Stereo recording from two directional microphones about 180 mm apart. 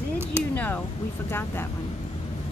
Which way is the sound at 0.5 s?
10° left (ahead or behind).